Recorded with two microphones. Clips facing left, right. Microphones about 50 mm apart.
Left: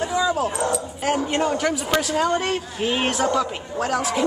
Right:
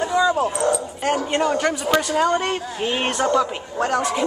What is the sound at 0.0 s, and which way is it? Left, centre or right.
Dog, centre.